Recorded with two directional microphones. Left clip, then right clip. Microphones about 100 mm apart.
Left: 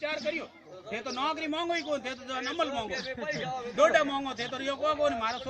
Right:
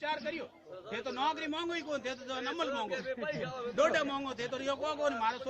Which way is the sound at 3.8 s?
40° right (ahead or behind).